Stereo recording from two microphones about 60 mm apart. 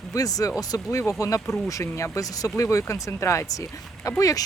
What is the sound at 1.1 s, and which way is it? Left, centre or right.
Speech, left.